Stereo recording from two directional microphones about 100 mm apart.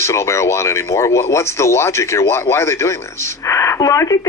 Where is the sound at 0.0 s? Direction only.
30° left (ahead or behind).